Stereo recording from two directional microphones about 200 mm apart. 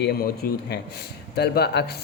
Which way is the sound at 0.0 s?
50° left (ahead or behind).